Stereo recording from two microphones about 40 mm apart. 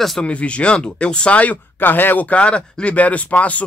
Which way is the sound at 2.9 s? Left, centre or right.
Left.